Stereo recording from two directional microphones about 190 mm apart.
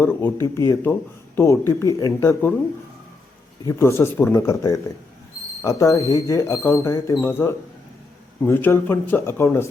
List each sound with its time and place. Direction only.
0.0 s speech: 10° left (ahead or behind)
3.7 s speech: 15° left (ahead or behind)